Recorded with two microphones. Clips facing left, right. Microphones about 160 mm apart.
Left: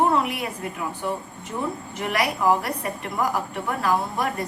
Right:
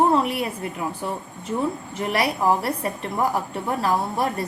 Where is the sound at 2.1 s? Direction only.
30° right (ahead or behind).